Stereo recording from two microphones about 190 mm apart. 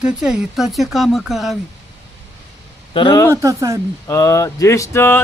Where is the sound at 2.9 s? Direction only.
25° left (ahead or behind).